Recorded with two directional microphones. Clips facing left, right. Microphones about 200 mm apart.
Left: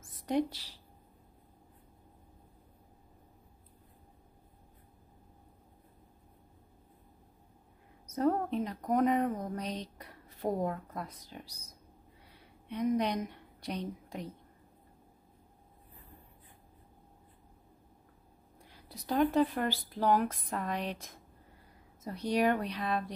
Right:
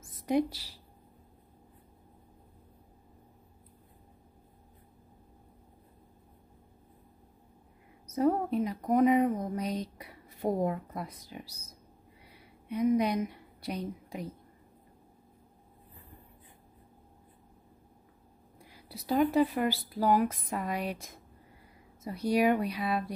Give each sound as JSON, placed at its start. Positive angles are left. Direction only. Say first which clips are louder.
{"t": 0.3, "sound": "speech", "louder": "right 3 dB", "side_deg": -10}
{"t": 8.1, "sound": "a woman's voice", "louder": "right 2 dB", "side_deg": -10}
{"t": 18.6, "sound": "speech", "louder": "right 4 dB", "side_deg": -10}